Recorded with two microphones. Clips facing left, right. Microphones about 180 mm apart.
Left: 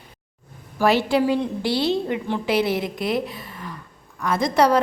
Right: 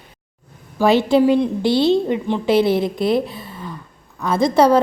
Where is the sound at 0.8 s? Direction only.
25° right (ahead or behind).